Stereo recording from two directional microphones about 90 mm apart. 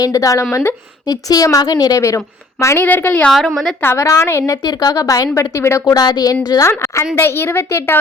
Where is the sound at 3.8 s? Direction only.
30° left (ahead or behind).